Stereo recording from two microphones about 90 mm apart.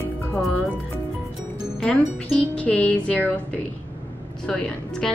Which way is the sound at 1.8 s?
15° left (ahead or behind).